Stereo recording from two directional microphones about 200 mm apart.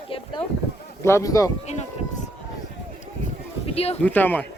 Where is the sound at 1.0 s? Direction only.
15° left (ahead or behind).